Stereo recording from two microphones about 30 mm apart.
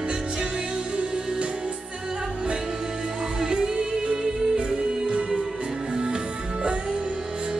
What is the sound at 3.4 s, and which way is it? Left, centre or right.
Music, right.